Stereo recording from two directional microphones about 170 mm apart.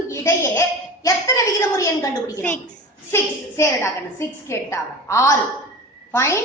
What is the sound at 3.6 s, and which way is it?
A woman's voice, 15° left (ahead or behind).